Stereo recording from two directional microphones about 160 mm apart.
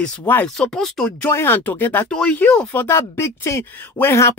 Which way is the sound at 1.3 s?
15° left (ahead or behind).